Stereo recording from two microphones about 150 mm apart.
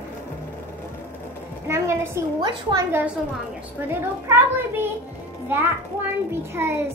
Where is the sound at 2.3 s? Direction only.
30° right (ahead or behind).